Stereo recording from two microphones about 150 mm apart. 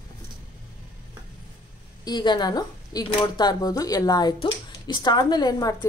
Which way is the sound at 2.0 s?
30° left (ahead or behind).